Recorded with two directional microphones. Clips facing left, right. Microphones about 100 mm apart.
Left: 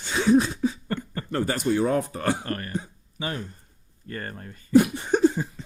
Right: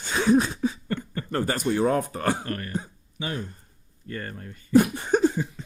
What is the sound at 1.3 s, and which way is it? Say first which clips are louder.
Speech: left 1 dB; 45° right (ahead or behind).